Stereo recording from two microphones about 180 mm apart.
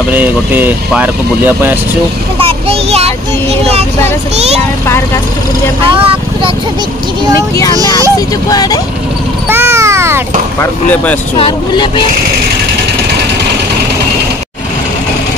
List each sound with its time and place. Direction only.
0.1 s speech: 10° right (ahead or behind)
2.3 s a sound: 30° right (ahead or behind)
4.8 s speech: 15° left (ahead or behind)
5.9 s vehicle: 30° right (ahead or behind)
7.5 s speech: 20° left (ahead or behind)
9.5 s a sound: 15° right (ahead or behind)
10.6 s speech: 10° left (ahead or behind)
11.3 s speech: 30° left (ahead or behind)